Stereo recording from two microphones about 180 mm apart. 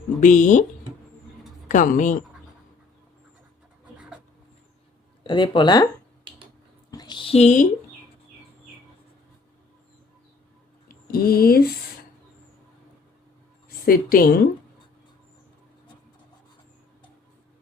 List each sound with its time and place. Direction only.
0.2 s a woman's voice: 45° left (ahead or behind)
1.6 s speech: 45° left (ahead or behind)
3.9 s writing: 5° right (ahead or behind)
5.2 s speech: 25° left (ahead or behind)
6.9 s a sound: 25° left (ahead or behind); by 7.7 s 40° left (ahead or behind)
10.8 s speech: 55° left (ahead or behind)
13.8 s a woman's voice: 55° left (ahead or behind)